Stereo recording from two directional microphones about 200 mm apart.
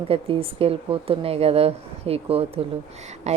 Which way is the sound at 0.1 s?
30° right (ahead or behind).